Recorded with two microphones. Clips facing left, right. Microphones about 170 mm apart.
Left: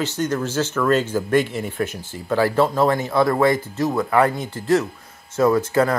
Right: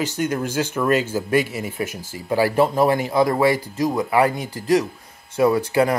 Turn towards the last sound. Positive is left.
turn(degrees=-10)  # may be behind; listen again after turning